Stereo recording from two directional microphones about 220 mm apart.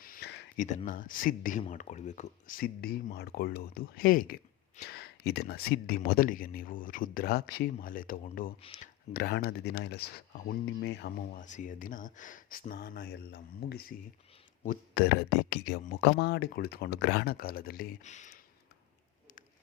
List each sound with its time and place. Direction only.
0.0 s speech: 45° left (ahead or behind)
11.4 s speech: 35° left (ahead or behind)